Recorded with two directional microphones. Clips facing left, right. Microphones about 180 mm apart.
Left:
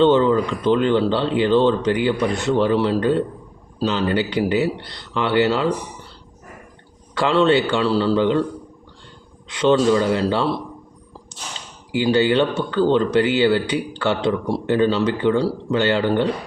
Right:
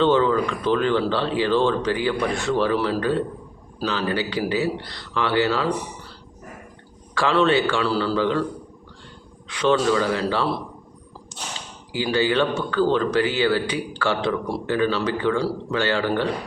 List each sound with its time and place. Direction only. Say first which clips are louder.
0.0 s speech: left 3 dB; 25° left (ahead or behind)
7.1 s speech: left 3 dB; 25° left (ahead or behind)
9.5 s speech: left 4 dB; 25° left (ahead or behind)
11.9 s speech: left 5 dB; 25° left (ahead or behind)